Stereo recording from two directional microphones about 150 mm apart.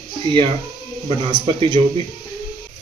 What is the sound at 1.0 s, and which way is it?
Speech, 35° right (ahead or behind).